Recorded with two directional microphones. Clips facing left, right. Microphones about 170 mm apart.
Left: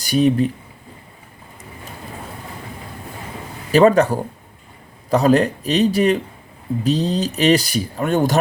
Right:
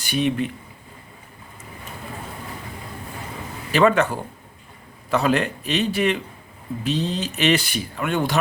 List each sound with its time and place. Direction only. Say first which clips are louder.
0.0 s speech: left 6 dB; 40° left (ahead or behind)
3.7 s speech: left 5 dB; 40° left (ahead or behind)